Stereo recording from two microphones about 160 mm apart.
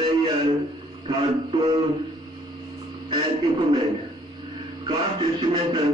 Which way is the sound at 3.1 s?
35° right (ahead or behind).